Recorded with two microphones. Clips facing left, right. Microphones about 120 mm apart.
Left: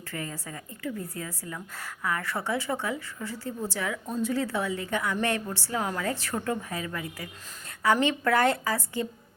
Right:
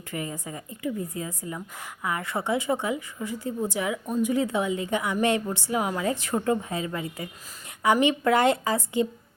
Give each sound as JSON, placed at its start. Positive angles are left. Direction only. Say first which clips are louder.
{"t": 0.1, "sound": "a woman's voice", "louder": "right 4 dB", "side_deg": -15}